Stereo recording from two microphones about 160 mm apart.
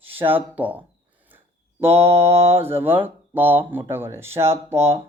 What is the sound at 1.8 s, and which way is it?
Speech, 15° right (ahead or behind).